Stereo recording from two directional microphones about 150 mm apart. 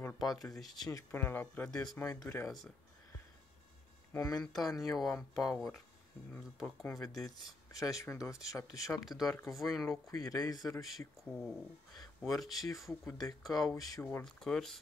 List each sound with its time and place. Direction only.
0.3 s speech: 25° left (ahead or behind)
0.6 s speech: centre (ahead or behind)
0.8 s speech: 20° left (ahead or behind)
4.1 s speech: 20° left (ahead or behind)
4.4 s speech: centre (ahead or behind)
7.2 s speech: 25° left (ahead or behind)
8.6 s speech: centre (ahead or behind)
10.1 s speech: 25° left (ahead or behind)
11.3 s speech: 5° left (ahead or behind)